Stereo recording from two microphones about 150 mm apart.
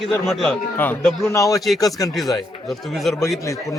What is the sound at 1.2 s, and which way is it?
Speech, 20° left (ahead or behind).